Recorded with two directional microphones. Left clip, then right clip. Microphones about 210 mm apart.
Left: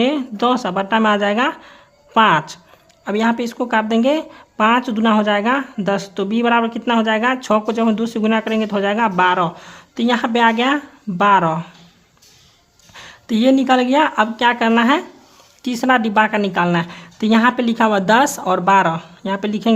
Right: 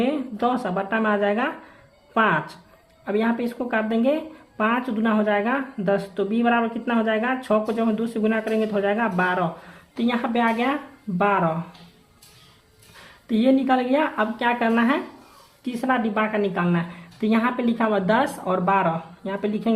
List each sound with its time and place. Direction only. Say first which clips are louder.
0.0 s speech: left 6 dB; 40° left (ahead or behind)
13.2 s speech: left 5 dB; 45° left (ahead or behind)